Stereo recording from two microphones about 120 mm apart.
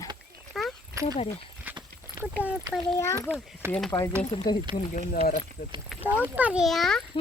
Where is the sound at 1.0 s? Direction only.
25° right (ahead or behind).